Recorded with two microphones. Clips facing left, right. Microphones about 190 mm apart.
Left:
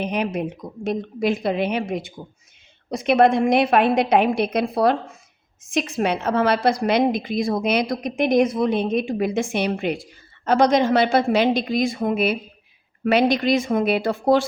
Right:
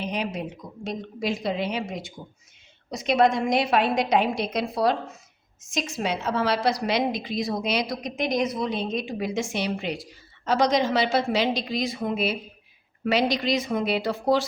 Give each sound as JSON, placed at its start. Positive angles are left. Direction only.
{"t": 0.0, "sound": "a woman's voice", "side_deg": 55}